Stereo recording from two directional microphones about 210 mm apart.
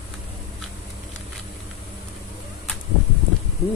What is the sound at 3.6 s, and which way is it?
Speech, 15° left (ahead or behind).